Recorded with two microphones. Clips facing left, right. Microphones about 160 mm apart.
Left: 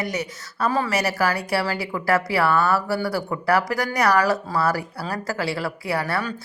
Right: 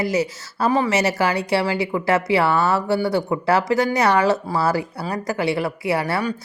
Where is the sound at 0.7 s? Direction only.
15° right (ahead or behind).